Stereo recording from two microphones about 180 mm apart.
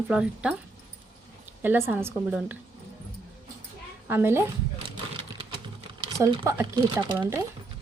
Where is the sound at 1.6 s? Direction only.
10° right (ahead or behind).